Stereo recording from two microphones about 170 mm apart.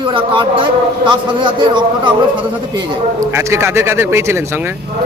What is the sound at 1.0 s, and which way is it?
A man's voice, 25° right (ahead or behind).